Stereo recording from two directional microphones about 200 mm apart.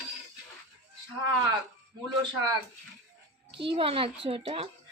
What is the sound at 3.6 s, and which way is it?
A woman's voice, 25° right (ahead or behind).